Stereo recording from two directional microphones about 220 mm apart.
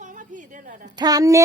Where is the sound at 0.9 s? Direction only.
15° right (ahead or behind).